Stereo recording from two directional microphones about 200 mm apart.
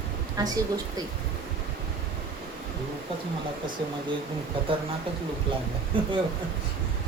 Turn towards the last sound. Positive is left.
turn(degrees=-25)  # may be behind; listen again after turning